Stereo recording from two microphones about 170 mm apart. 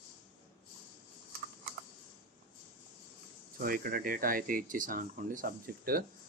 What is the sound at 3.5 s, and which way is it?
Speech, 60° right (ahead or behind).